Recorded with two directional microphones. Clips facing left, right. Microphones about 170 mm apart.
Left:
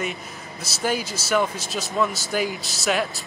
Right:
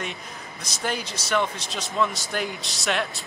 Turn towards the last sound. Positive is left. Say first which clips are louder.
# left 3 dB
turn(degrees=0)  # may be behind; listen again after turning